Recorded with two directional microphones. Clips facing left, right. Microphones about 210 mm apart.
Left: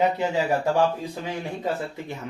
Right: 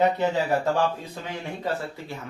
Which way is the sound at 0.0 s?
10° left (ahead or behind).